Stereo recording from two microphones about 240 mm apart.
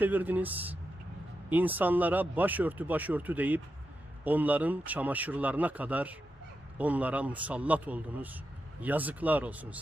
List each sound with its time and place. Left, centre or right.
0.0 s speech: centre